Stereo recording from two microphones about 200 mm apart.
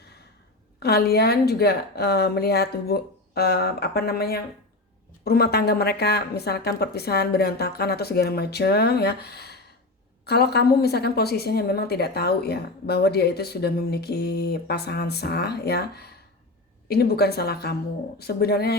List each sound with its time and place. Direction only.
0.8 s a woman's voice: 55° left (ahead or behind)